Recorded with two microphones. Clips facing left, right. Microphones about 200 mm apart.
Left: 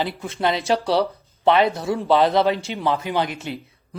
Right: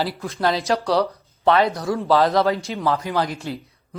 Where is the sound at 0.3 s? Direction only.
20° left (ahead or behind).